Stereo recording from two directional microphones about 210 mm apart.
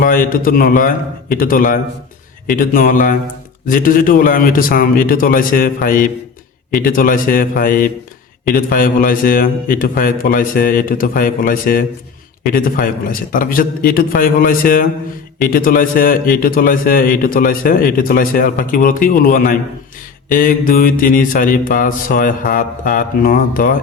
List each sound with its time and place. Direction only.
0.0 s speech: 40° left (ahead or behind)